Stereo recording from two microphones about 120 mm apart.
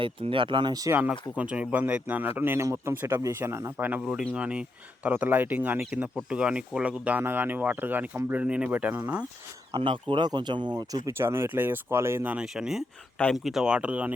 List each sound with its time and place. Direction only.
0.0 s speech: 45° right (ahead or behind)
1.4 s speech: 10° right (ahead or behind)
4.0 s speech: 5° right (ahead or behind)
9.7 s speech: 45° right (ahead or behind)
11.0 s speech: 20° right (ahead or behind)